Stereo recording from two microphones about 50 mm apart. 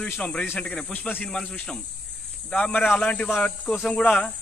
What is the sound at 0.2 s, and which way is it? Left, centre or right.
Speech, left.